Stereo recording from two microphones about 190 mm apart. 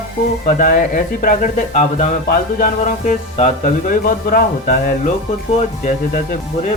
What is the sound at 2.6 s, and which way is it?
Music, 40° left (ahead or behind).